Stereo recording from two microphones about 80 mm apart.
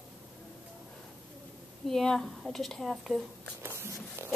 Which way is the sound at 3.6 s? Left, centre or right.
Right.